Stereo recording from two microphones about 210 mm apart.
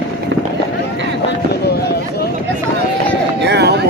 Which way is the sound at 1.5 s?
50° left (ahead or behind).